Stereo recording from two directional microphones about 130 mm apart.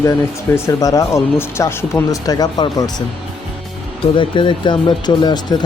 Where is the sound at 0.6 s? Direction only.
25° left (ahead or behind).